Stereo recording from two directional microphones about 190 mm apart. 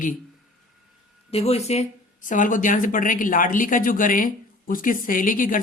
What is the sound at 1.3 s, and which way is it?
Speech, 35° left (ahead or behind).